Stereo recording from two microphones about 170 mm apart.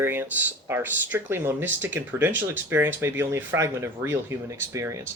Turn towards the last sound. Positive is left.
turn(degrees=-20)  # may be behind; listen again after turning